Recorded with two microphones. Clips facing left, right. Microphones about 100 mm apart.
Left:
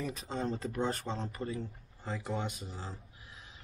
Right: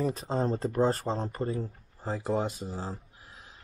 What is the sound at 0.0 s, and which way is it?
Speech, 35° right (ahead or behind).